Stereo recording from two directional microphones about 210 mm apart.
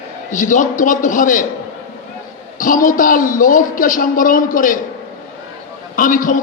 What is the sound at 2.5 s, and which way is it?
A man's voice, 40° left (ahead or behind).